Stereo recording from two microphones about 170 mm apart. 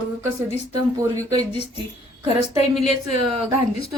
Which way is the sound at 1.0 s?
20° right (ahead or behind).